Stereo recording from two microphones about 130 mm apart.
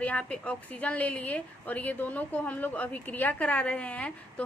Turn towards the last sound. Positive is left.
turn(degrees=10)  # may be behind; listen again after turning